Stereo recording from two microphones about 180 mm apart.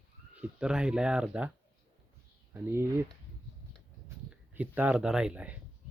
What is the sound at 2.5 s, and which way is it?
Speech, 10° right (ahead or behind).